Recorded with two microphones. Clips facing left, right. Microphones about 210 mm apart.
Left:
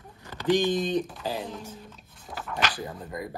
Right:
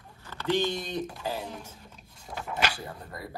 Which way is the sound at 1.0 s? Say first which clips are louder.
Even; 10° right (ahead or behind).